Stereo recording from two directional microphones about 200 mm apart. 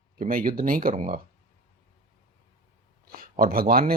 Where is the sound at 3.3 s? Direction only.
45° right (ahead or behind).